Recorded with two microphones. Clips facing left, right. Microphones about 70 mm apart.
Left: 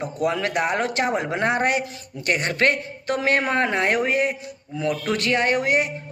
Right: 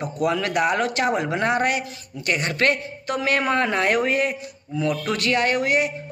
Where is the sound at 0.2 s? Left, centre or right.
Left.